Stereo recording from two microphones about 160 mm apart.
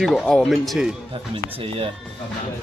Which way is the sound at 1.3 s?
35° right (ahead or behind).